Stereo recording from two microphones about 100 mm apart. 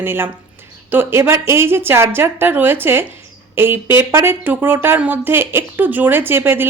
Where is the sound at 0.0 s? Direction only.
25° right (ahead or behind).